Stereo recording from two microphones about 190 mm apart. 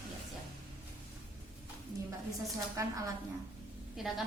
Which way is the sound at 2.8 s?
15° right (ahead or behind).